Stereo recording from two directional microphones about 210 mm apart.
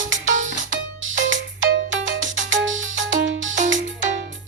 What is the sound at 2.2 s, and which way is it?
Music, 65° right (ahead or behind).